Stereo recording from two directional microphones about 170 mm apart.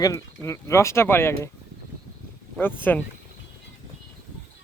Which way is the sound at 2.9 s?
10° left (ahead or behind).